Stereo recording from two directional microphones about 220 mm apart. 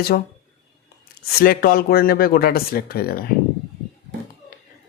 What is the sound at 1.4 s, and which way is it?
Speech, 45° left (ahead or behind).